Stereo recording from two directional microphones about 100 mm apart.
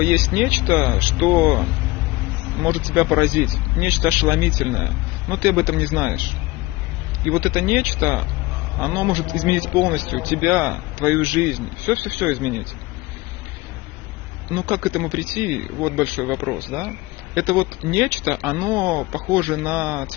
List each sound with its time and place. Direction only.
0.3 s speech: 25° right (ahead or behind)
7.3 s speech: 25° right (ahead or behind)
10.4 s speech: 20° right (ahead or behind)
14.8 s speech: 20° right (ahead or behind)